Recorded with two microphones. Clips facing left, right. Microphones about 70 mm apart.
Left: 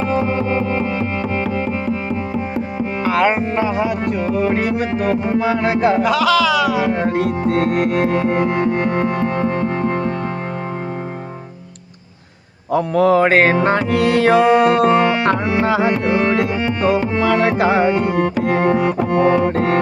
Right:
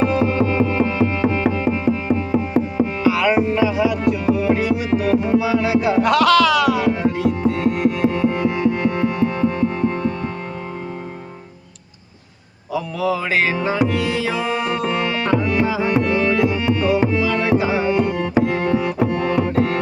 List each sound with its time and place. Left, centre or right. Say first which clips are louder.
0.1 s music: even; left
3.0 s music: left 1 dB; left
6.0 s music: right 1 dB; centre
6.9 s music: left 1 dB; left
12.7 s music: left 8 dB; left
16.1 s music: left 1 dB; left
17.6 s tabla: left 5 dB; left
17.8 s music: left 3 dB; left